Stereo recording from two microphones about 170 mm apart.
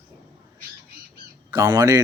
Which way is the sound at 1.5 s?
20° right (ahead or behind).